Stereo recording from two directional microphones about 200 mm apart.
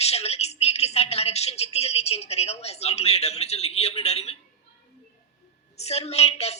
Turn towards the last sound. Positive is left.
turn(degrees=30)  # may be behind; listen again after turning